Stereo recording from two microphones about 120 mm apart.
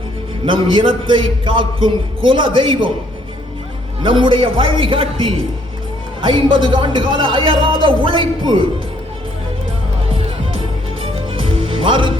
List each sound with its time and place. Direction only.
0.4 s a man's voice: 40° right (ahead or behind)
4.0 s a man's voice: 45° right (ahead or behind)
10.2 s music: 50° right (ahead or behind)